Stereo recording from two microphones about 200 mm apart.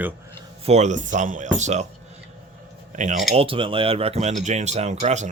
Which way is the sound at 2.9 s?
40° right (ahead or behind).